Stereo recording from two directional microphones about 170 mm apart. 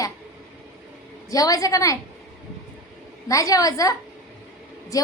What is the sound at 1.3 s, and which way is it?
Speech, 20° left (ahead or behind).